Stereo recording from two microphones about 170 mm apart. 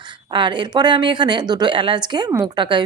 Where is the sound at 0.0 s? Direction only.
25° right (ahead or behind).